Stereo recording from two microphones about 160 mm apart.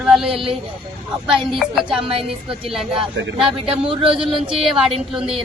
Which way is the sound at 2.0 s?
35° right (ahead or behind).